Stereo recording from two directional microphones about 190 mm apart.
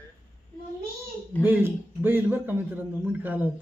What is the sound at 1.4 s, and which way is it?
A man's voice, 10° right (ahead or behind).